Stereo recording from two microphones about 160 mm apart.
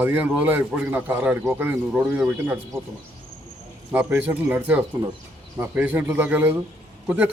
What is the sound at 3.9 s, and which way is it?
A man's voice, 15° right (ahead or behind).